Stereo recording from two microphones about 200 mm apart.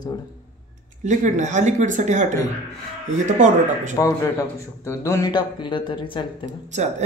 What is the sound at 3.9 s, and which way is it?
A man's voice, 15° left (ahead or behind).